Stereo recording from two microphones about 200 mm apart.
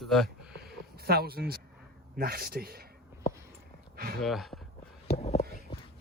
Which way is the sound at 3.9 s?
50° right (ahead or behind).